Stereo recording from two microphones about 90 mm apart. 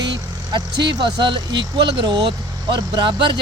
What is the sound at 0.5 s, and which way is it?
Speech, 55° right (ahead or behind).